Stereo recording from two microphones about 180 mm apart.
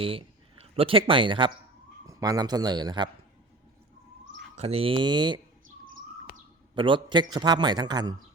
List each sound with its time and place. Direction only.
0.0 s a man's voice: 30° right (ahead or behind)
4.5 s a man's voice: 35° right (ahead or behind)
6.7 s a man's voice: 25° right (ahead or behind)